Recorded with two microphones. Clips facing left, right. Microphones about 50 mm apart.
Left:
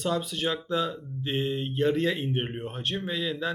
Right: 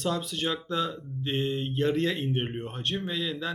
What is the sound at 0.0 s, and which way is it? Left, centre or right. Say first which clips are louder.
Speech: left 1 dB; centre.